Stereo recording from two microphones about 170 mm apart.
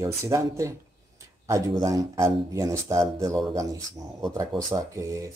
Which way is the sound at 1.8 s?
20° right (ahead or behind).